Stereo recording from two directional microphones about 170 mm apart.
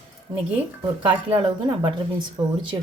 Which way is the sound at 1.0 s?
25° right (ahead or behind).